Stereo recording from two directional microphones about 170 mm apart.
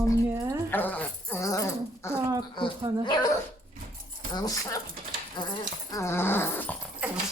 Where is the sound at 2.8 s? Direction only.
25° right (ahead or behind).